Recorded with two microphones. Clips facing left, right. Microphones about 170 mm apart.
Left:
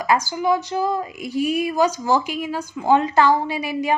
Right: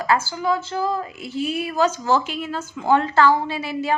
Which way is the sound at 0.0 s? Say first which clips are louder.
Left 1 dB; 15° left (ahead or behind).